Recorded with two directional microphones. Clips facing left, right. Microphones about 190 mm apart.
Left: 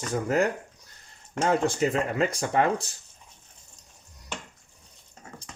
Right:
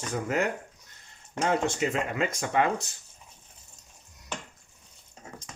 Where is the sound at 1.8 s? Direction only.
35° left (ahead or behind).